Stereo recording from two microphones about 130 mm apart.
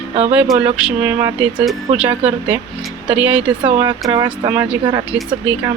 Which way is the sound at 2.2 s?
50° right (ahead or behind).